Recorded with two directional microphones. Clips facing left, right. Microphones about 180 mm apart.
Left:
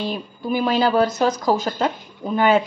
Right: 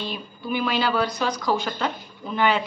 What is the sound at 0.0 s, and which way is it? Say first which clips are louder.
Speech: left 6 dB; 40° left (ahead or behind).